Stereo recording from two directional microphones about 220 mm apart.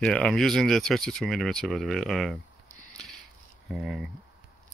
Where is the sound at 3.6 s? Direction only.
5° right (ahead or behind).